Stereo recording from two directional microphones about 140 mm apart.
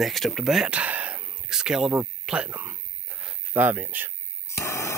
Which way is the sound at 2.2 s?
10° right (ahead or behind).